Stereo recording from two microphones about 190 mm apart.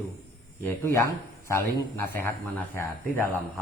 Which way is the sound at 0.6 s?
10° left (ahead or behind).